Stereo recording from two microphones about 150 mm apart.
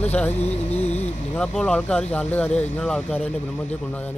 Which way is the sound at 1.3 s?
5° left (ahead or behind).